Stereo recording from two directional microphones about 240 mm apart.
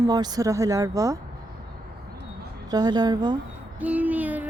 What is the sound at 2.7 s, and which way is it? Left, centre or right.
Speech, centre.